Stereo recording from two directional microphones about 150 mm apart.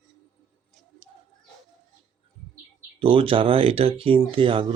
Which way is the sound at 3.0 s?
35° right (ahead or behind).